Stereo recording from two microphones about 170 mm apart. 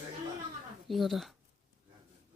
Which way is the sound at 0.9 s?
Centre (ahead or behind).